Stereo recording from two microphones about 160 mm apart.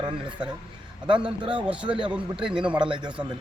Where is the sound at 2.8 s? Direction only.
30° right (ahead or behind).